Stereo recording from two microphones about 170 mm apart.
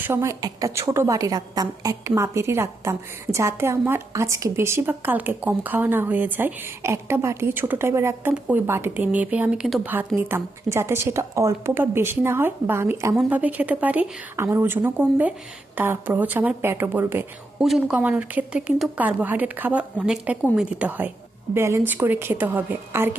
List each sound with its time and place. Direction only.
0.0 s a woman's voice: 15° right (ahead or behind)
10.2 s a woman's voice: 15° right (ahead or behind)